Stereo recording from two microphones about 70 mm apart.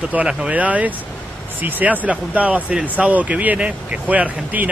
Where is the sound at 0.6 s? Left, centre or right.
Right.